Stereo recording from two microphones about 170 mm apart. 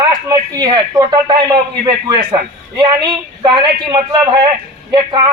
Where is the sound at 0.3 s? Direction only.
20° right (ahead or behind).